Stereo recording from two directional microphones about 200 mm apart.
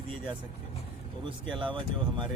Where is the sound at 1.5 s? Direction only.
25° right (ahead or behind).